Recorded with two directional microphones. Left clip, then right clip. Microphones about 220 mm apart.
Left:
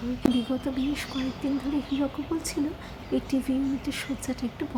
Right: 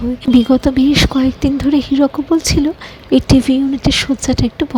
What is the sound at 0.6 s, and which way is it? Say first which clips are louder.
Speech: right 18 dB; 40° right (ahead or behind).